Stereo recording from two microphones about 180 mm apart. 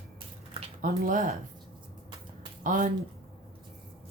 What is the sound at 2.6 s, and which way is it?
Speech, 45° right (ahead or behind).